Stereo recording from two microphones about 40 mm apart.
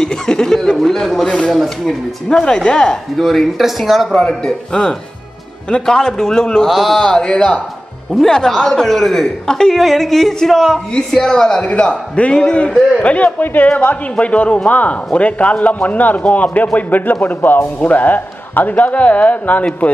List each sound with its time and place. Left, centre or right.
0.0 s a sound: centre
1.2 s a sound: left
1.5 s a man's voice: centre
2.4 s a man's voice: left
3.2 s speech: centre
4.1 s a man's voice: centre
6.7 s speech: centre
7.0 s a man's voice: centre
9.8 s speech: centre
10.9 s a man's voice: centre
11.6 s a man's voice: left
13.4 s a man's voice: left
14.2 s a man's voice: left
19.8 s speech: left